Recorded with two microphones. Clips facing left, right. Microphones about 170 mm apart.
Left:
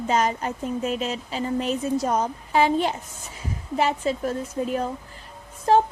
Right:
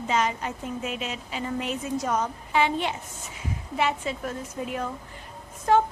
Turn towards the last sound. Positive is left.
turn(degrees=30)  # may be behind; listen again after turning